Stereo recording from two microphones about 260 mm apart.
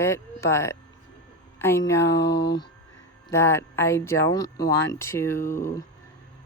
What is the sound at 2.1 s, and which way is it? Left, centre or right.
Speech, left.